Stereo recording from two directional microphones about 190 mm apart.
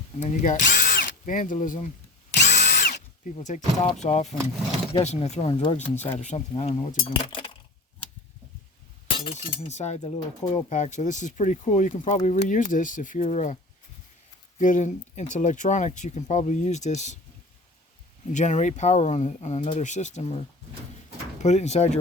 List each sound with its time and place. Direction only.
0.2 s speech: 40° left (ahead or behind)
2.3 s drill: 60° left (ahead or behind)
2.9 s speech: 40° left (ahead or behind)
9.0 s speech: 30° left (ahead or behind)
14.6 s speech: 40° left (ahead or behind)
18.3 s speech: 40° left (ahead or behind)